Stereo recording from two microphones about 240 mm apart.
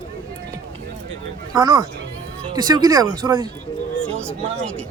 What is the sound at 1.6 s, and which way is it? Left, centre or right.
Speech, centre.